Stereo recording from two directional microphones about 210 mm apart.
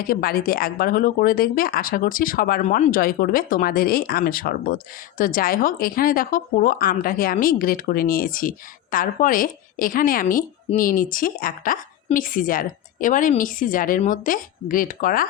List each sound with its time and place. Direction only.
0.1 s speech: 45° left (ahead or behind)